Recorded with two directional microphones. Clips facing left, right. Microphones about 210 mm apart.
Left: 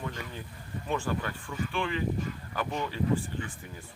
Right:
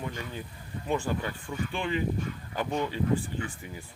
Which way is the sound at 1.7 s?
20° right (ahead or behind).